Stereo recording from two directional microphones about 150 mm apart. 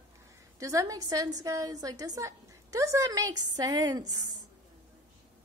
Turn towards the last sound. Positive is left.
turn(degrees=-25)  # may be behind; listen again after turning